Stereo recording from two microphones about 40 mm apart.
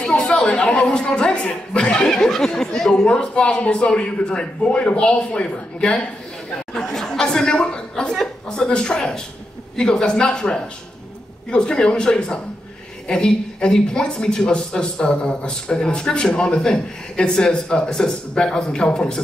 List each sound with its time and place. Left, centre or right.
0.0 s a woman's voice: left
2.1 s speech: centre
3.1 s a woman's voice: left
6.7 s a woman's voice: centre